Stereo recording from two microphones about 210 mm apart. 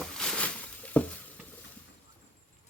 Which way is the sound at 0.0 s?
5° left (ahead or behind).